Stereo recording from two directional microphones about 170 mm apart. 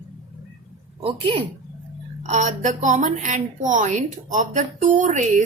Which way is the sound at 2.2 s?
45° right (ahead or behind).